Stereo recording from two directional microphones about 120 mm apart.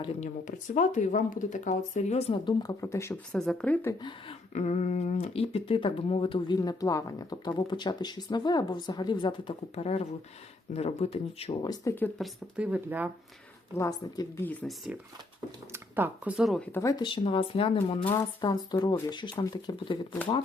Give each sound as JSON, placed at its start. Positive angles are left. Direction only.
{"t": 0.2, "sound": "speech", "side_deg": 90}
{"t": 2.4, "sound": "speech", "side_deg": 40}
{"t": 2.8, "sound": "speech", "side_deg": 25}
{"t": 3.3, "sound": "speech", "side_deg": 5}
{"t": 4.5, "sound": "speech", "side_deg": 75}
{"t": 9.7, "sound": "speech", "side_deg": 60}
{"t": 11.6, "sound": "speech", "side_deg": 35}
{"t": 12.2, "sound": "speech", "side_deg": -10}
{"t": 13.7, "sound": "speech", "side_deg": 25}
{"t": 14.4, "sound": "speech", "side_deg": 10}
{"t": 15.7, "sound": "speech", "side_deg": -15}
{"t": 16.8, "sound": "speech", "side_deg": 40}
{"t": 18.4, "sound": "speech", "side_deg": 35}